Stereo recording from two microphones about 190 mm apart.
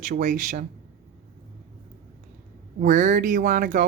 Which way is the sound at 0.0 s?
45° right (ahead or behind).